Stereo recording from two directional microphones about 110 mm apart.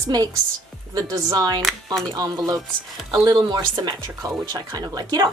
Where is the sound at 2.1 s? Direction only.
35° right (ahead or behind).